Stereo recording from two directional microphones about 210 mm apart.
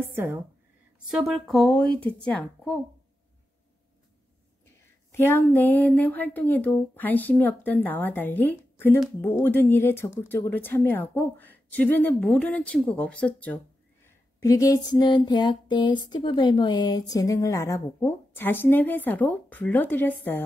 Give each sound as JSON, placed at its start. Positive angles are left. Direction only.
{"t": 0.0, "sound": "speech", "side_deg": -10}
{"t": 1.1, "sound": "speech", "side_deg": 0}
{"t": 5.1, "sound": "speech", "side_deg": 10}
{"t": 14.0, "sound": "a sound", "side_deg": 15}
{"t": 16.1, "sound": "speech", "side_deg": 20}